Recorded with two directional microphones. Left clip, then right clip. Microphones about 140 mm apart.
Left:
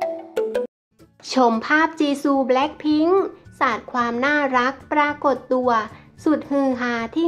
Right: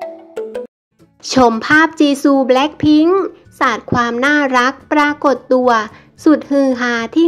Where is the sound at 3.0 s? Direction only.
20° right (ahead or behind).